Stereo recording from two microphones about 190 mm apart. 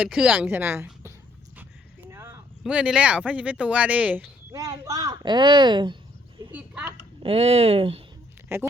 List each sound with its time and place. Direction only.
0.0 s a woman's voice: 5° right (ahead or behind); by 6.0 s 25° right (ahead or behind)
6.5 s a sound: 5° right (ahead or behind)
7.2 s speech: 30° right (ahead or behind)
8.5 s a woman's voice: 15° right (ahead or behind)